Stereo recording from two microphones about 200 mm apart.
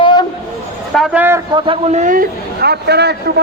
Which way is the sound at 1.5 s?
25° right (ahead or behind).